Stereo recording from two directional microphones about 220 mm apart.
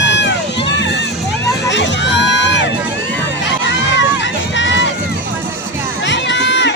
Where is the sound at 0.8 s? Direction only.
50° left (ahead or behind).